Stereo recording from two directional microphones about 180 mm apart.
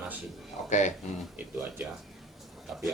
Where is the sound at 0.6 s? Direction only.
40° left (ahead or behind).